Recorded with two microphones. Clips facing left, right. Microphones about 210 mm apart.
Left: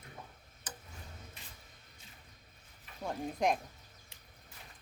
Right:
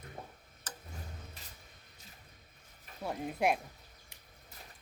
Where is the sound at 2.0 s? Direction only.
40° right (ahead or behind).